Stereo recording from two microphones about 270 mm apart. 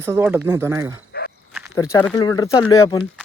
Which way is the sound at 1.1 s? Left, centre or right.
Left.